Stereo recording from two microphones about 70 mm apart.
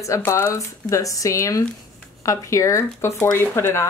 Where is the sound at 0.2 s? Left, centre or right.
Left.